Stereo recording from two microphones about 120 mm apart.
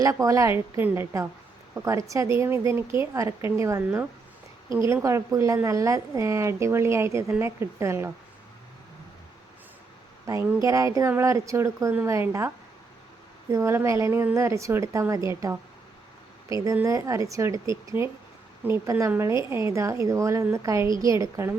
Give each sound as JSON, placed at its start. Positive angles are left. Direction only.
{"t": 0.0, "sound": "a woman's voice", "side_deg": -30}
{"t": 5.0, "sound": "a woman's voice", "side_deg": -25}
{"t": 10.6, "sound": "a woman's voice", "side_deg": -25}
{"t": 13.5, "sound": "a woman's voice", "side_deg": -20}